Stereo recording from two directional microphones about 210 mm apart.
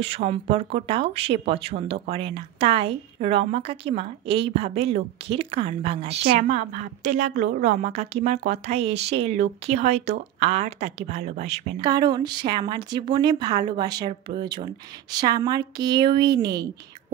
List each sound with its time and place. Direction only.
0.0 s a woman's voice: 25° right (ahead or behind)
11.8 s a woman's voice: 20° right (ahead or behind)